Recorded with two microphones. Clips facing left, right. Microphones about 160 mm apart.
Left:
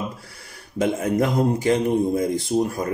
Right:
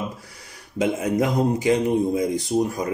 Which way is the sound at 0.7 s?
15° right (ahead or behind).